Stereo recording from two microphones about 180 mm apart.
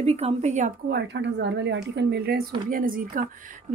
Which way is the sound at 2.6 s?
50° right (ahead or behind).